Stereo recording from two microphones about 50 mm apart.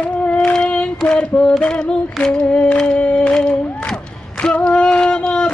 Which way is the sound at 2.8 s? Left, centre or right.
Centre.